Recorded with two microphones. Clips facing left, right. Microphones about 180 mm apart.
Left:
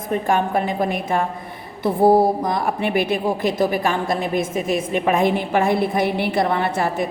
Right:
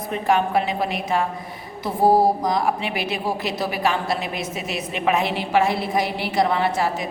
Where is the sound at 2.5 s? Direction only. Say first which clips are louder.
Left 1 dB; 55° left (ahead or behind).